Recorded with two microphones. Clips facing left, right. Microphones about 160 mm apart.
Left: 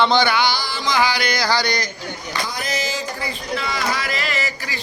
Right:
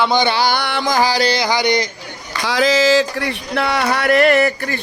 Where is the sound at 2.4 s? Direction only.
90° right; by 4.5 s 60° right (ahead or behind).